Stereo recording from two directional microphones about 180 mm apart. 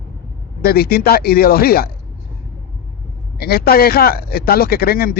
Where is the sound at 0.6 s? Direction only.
60° left (ahead or behind).